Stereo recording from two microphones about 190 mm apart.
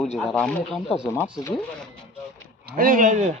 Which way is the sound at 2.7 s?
50° right (ahead or behind).